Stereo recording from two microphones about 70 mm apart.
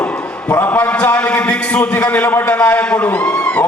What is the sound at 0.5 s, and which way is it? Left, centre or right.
A man's voice, left.